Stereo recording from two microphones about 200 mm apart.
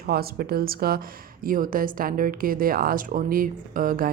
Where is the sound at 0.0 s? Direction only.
50° right (ahead or behind).